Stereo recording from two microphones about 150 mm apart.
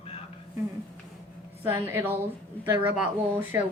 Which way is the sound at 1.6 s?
15° right (ahead or behind).